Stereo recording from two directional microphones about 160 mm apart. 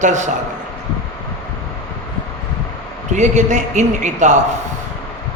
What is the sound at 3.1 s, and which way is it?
A man's voice, 50° right (ahead or behind).